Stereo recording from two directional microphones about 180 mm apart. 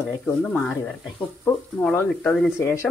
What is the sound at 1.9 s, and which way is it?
Speech, 5° left (ahead or behind).